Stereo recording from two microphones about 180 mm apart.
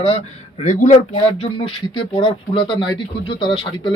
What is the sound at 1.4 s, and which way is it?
Speech, 30° left (ahead or behind).